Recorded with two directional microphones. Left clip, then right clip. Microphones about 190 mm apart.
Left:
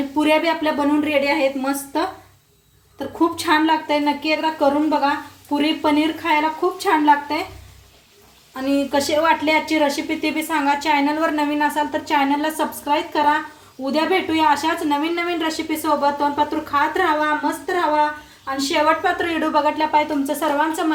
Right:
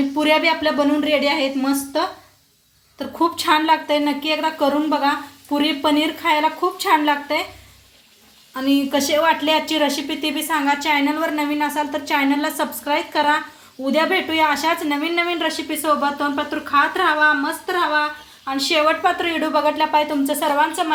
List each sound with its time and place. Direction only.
0.2 s speech: 30° right (ahead or behind)
3.2 s speech: 30° right (ahead or behind)
8.5 s speech: 30° right (ahead or behind)